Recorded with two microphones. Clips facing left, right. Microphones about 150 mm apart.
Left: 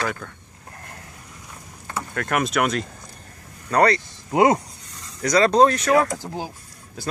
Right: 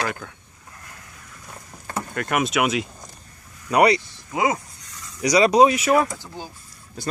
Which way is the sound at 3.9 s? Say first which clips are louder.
Left 6 dB; 60° left (ahead or behind).